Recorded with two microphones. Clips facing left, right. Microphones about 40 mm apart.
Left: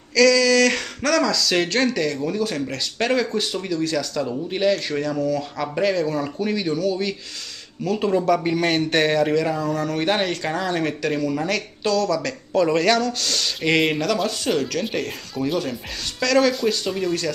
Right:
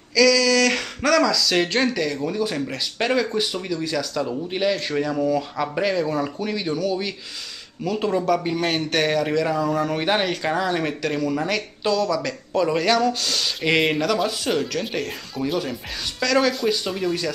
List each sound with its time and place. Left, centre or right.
0.1 s a sound: centre
1.1 s speech: centre
6.3 s speech: centre